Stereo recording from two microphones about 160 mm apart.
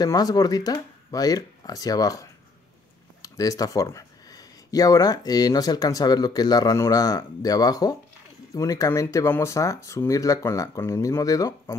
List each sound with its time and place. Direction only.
0.0 s speech: 25° left (ahead or behind)